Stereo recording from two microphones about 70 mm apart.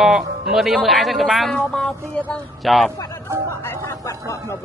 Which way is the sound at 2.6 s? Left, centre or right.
Centre.